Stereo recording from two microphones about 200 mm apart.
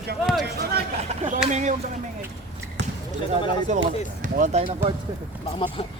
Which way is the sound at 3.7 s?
35° right (ahead or behind).